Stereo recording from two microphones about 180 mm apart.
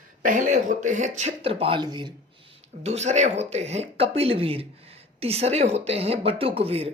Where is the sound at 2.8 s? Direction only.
40° right (ahead or behind).